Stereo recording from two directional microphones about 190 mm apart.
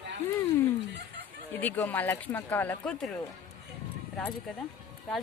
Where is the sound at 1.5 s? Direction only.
10° left (ahead or behind).